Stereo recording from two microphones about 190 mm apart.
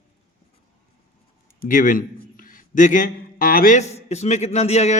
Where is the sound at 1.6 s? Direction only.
45° left (ahead or behind).